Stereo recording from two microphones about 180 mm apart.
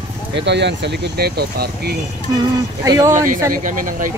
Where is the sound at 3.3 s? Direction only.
50° right (ahead or behind).